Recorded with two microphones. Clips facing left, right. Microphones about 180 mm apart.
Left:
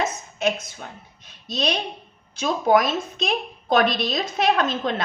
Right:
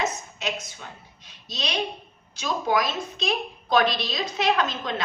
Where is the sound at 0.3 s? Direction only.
50° left (ahead or behind).